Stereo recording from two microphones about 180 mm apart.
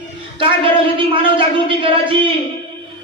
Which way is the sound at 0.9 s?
30° right (ahead or behind).